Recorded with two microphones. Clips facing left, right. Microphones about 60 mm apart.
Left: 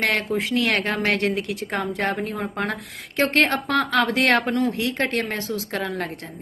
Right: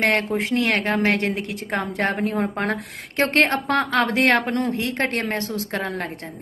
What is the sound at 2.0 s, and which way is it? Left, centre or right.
Speech, right.